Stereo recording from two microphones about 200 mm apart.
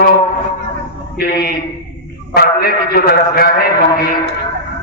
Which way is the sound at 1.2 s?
50° left (ahead or behind).